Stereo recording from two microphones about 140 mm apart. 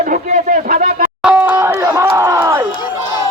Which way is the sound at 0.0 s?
70° right (ahead or behind).